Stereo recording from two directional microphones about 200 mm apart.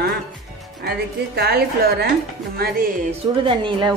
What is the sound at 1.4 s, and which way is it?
Speech, 55° right (ahead or behind).